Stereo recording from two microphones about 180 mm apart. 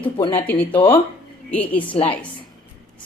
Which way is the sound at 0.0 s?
25° left (ahead or behind).